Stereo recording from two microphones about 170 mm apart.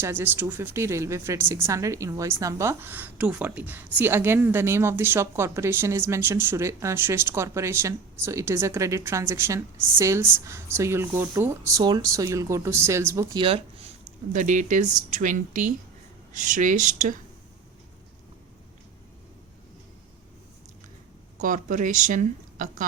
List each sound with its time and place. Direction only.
0.0 s a woman's voice: 15° right (ahead or behind); by 13.9 s 30° right (ahead or behind)
14.3 s speech: 45° right (ahead or behind)
21.4 s speech: 50° right (ahead or behind)